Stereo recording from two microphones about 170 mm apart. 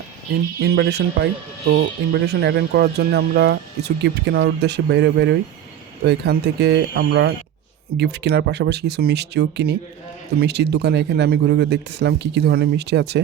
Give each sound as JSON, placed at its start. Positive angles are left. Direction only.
{"t": 0.6, "sound": "speech", "side_deg": -75}
{"t": 7.9, "sound": "speech", "side_deg": -85}